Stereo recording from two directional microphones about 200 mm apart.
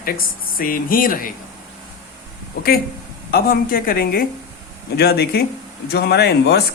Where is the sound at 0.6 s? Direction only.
45° left (ahead or behind).